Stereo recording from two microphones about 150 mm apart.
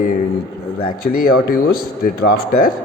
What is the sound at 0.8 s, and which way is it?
Speech, 80° left.